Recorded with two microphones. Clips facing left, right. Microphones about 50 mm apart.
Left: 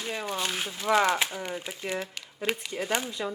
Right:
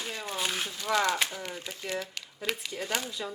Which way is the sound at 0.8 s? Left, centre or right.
Left.